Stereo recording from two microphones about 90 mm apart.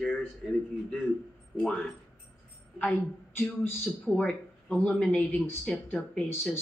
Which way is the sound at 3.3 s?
20° left (ahead or behind).